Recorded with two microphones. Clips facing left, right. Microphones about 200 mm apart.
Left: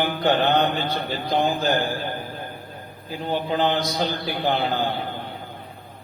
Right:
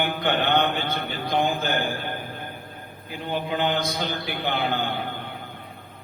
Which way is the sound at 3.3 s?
35° left (ahead or behind).